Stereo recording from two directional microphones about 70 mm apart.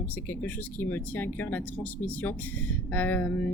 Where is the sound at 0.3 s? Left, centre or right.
Left.